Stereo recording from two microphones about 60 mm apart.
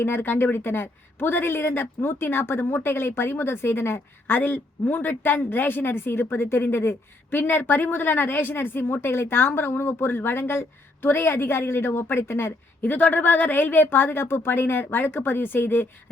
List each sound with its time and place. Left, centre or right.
0.0 s a woman's voice: left
4.4 s a woman's voice: left
12.8 s a woman's voice: left